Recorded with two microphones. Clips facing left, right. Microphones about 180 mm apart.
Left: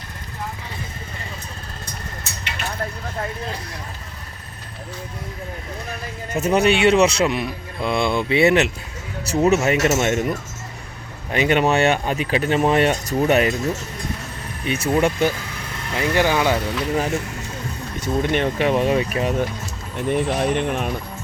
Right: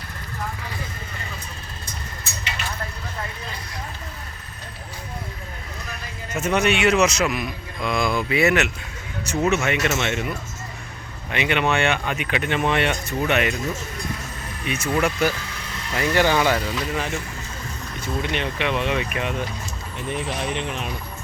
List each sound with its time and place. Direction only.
6.3 s a man's voice: 35° left (ahead or behind)
14.6 s speech: 35° left (ahead or behind)
14.9 s speech: 20° left (ahead or behind)
16.9 s a man's voice: 40° left (ahead or behind)
20.1 s speech: 55° left (ahead or behind)